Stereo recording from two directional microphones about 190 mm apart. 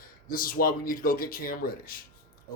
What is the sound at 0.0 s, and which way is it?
Speech, 50° left (ahead or behind).